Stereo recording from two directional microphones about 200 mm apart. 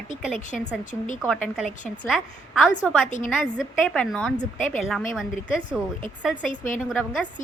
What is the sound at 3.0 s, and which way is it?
Speech, 35° left (ahead or behind).